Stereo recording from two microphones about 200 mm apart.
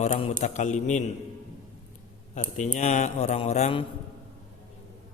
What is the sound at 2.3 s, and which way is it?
A man's voice, 35° left (ahead or behind).